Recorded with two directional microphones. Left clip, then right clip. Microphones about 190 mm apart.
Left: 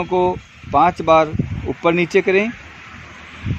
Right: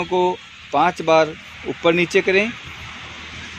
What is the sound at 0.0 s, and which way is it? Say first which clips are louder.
Speech: left 1 dB; 60° left (ahead or behind).